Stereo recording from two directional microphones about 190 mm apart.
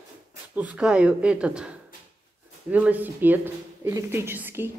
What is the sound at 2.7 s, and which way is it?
Speech, 10° right (ahead or behind).